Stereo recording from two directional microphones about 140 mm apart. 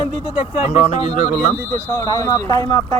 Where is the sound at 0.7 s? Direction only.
55° left (ahead or behind).